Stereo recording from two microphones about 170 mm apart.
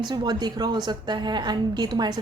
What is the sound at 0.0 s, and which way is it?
A woman's voice, 25° right (ahead or behind).